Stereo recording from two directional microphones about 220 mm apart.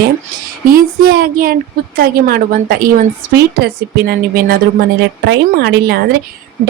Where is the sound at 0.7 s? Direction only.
40° right (ahead or behind).